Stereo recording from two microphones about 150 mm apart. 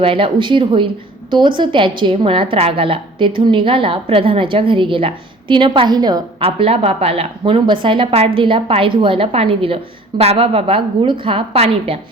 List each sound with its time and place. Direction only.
0.0 s a woman's voice: 35° right (ahead or behind)
6.4 s a woman's voice: 40° right (ahead or behind)